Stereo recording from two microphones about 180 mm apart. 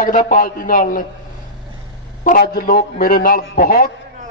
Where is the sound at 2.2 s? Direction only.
50° left (ahead or behind).